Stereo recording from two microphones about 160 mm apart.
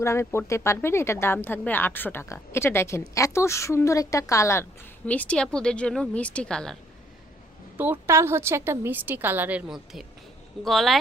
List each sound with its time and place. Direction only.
0.0 s speech: 15° left (ahead or behind)
7.8 s a woman's voice: 15° right (ahead or behind)